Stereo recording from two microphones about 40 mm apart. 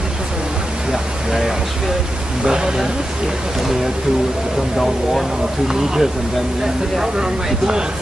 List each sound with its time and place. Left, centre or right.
2.4 s speech: centre
5.7 s speech: centre